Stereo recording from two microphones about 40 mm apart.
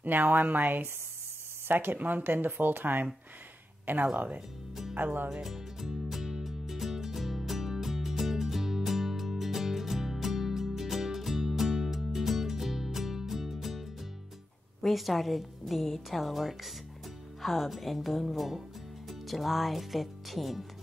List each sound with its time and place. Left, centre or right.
0.0 s speech: right
1.7 s speech: right
2.0 s speech: right
5.3 s music: centre
14.8 s a woman's voice: centre